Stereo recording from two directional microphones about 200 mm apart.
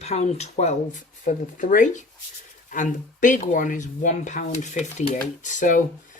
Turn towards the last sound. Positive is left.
turn(degrees=40)  # may be behind; listen again after turning